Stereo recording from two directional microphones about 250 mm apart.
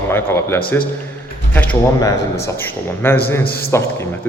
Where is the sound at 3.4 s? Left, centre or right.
Left.